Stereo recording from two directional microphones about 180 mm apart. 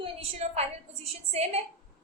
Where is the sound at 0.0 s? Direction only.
35° right (ahead or behind).